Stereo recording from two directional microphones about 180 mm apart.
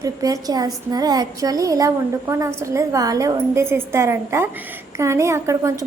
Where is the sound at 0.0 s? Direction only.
20° right (ahead or behind).